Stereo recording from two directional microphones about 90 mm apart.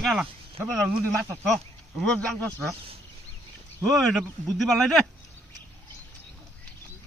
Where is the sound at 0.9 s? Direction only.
15° right (ahead or behind).